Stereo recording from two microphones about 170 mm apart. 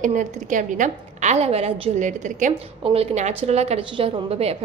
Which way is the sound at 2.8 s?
35° right (ahead or behind).